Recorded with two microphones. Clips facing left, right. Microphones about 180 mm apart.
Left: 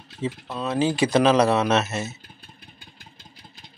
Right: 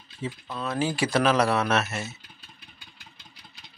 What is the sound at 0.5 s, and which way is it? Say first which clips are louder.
Speech: left 4 dB; 20° left (ahead or behind).